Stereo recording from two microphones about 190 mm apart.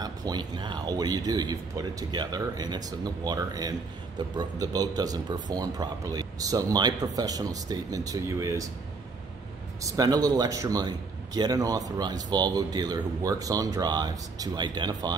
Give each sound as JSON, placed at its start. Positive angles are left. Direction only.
{"t": 0.0, "sound": "a man's voice", "side_deg": -20}
{"t": 9.8, "sound": "a man's voice", "side_deg": -20}